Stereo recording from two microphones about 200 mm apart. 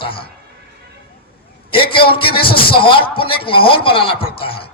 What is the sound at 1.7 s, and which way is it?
A man's voice, 25° left (ahead or behind).